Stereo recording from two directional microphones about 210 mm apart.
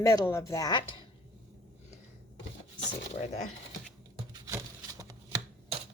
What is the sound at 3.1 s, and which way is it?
Speech, 35° left (ahead or behind).